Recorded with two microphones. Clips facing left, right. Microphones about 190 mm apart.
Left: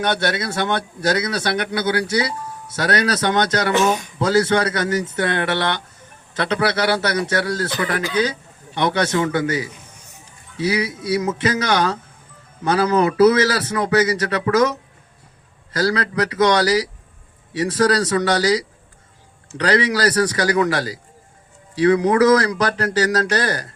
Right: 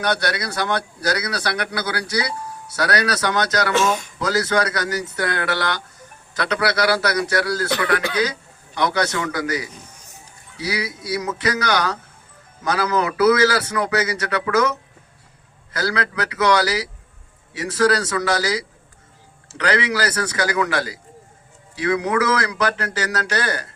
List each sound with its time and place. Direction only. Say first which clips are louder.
0.0 s a man's voice: left 2 dB; 25° left (ahead or behind)
3.7 s speech: left 2 dB; 15° left (ahead or behind)
4.2 s a man's voice: left 4 dB; 30° left (ahead or behind)
8.7 s a man's voice: left 2 dB; 30° left (ahead or behind)